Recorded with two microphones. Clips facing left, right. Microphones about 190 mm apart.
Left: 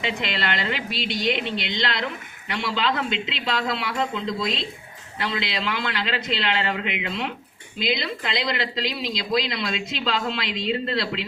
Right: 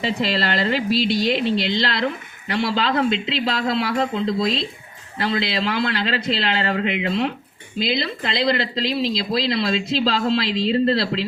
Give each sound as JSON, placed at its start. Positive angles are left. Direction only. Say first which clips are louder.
{"t": 0.0, "sound": "speech", "louder": "right 5 dB", "side_deg": -35}